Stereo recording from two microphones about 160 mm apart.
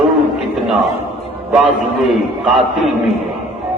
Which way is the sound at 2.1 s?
Centre (ahead or behind).